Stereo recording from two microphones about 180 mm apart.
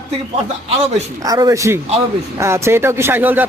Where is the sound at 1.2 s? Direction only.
20° right (ahead or behind).